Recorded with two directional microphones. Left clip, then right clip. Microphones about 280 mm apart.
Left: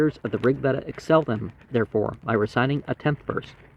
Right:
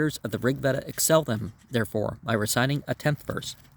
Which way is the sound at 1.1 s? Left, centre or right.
Right.